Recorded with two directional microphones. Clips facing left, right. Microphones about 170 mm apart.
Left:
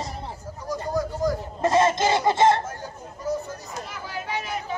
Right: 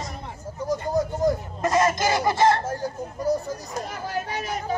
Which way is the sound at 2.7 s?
35° right (ahead or behind).